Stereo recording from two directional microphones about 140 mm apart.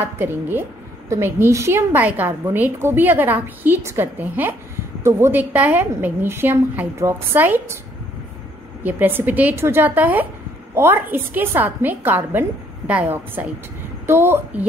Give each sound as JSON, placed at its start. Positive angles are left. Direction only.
{"t": 0.0, "sound": "a woman's voice", "side_deg": -15}
{"t": 8.8, "sound": "a woman's voice", "side_deg": -15}